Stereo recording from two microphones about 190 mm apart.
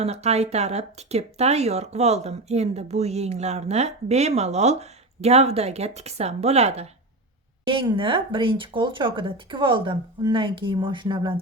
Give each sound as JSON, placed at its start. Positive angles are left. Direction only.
{"t": 0.0, "sound": "speech", "side_deg": -35}